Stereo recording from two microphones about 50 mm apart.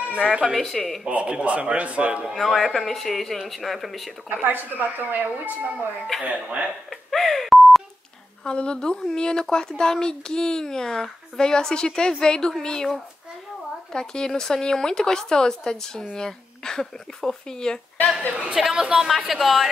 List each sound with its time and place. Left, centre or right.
0.0 s speech: centre
0.6 s speech: centre
1.4 s a man's voice: right
2.3 s speech: centre
4.3 s a man's voice: right
7.1 s beep: centre
8.5 s speech: centre
13.9 s speech: centre
18.5 s a woman's voice: centre